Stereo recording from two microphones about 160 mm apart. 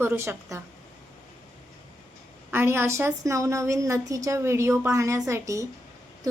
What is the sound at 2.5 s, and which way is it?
A woman's voice, 15° right (ahead or behind).